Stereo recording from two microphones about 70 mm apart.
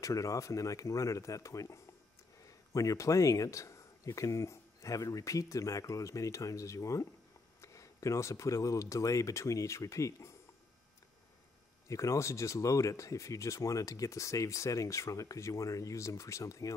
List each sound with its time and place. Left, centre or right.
0.0 s speech: left
11.9 s speech: left